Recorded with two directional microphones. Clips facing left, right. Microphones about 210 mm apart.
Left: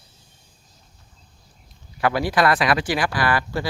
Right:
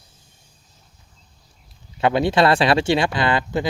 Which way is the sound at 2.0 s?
25° right (ahead or behind).